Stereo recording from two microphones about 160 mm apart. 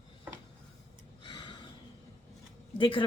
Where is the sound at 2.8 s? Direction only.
30° left (ahead or behind).